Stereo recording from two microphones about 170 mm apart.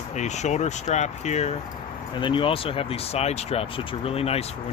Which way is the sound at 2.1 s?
30° left (ahead or behind).